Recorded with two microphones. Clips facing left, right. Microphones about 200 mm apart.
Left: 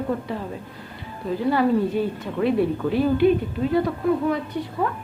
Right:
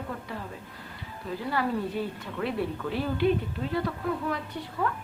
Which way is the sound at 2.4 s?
20° left (ahead or behind).